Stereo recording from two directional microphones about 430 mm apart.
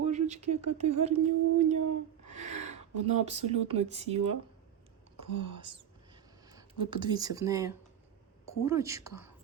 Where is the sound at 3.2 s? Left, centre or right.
Centre.